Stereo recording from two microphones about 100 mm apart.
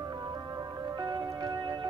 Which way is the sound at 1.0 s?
45° right (ahead or behind).